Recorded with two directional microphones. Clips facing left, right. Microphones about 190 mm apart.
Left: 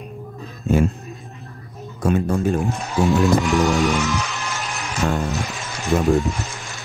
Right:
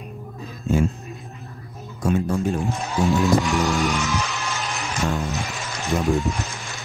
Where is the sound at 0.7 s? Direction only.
60° left (ahead or behind).